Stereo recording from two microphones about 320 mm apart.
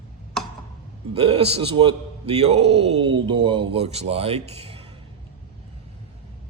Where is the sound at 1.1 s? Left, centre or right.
Centre.